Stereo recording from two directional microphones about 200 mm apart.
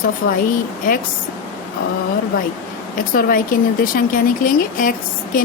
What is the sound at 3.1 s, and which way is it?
A woman's voice, 45° left (ahead or behind).